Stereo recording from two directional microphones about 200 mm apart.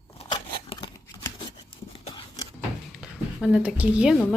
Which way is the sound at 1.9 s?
30° left (ahead or behind).